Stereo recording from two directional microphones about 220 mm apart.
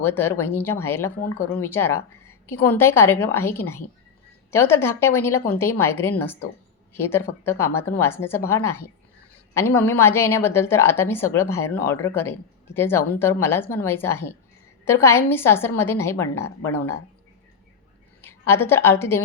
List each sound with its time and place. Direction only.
0.0 s a woman's voice: 10° left (ahead or behind)
18.2 s a woman's voice: 10° left (ahead or behind)